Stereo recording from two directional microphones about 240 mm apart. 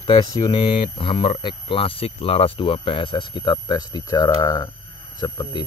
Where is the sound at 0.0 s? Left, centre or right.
Centre.